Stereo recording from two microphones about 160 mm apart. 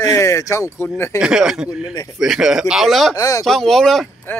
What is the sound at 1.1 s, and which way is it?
Speech, 5° right (ahead or behind).